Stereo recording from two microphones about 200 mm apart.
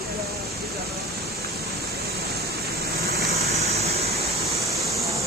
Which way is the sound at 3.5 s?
30° right (ahead or behind).